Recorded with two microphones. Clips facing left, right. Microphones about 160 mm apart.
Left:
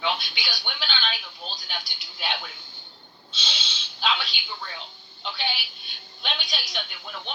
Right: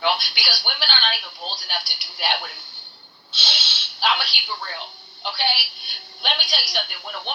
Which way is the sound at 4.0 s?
70° right (ahead or behind).